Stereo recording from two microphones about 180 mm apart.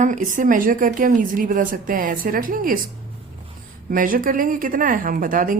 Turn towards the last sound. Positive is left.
turn(degrees=-50)  # may be behind; listen again after turning